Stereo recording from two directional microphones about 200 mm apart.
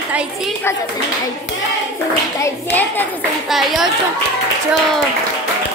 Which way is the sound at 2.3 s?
10° left (ahead or behind).